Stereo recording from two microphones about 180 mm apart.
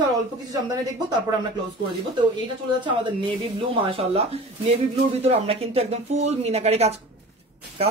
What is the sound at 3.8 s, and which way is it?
Speech, 30° right (ahead or behind).